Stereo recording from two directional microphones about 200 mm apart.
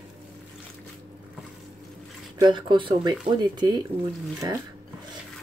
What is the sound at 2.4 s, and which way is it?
Speech, 25° right (ahead or behind).